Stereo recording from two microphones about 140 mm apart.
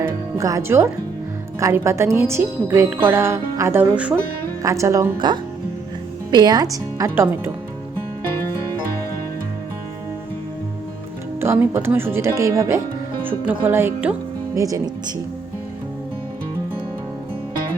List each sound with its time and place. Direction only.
0.0 s speech: 20° right (ahead or behind)
7.2 s speech: 15° right (ahead or behind)
11.3 s speech: 15° right (ahead or behind)
14.5 s speech: 25° right (ahead or behind)